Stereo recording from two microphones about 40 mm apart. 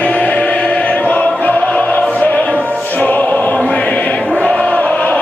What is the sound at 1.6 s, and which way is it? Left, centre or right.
Music, left.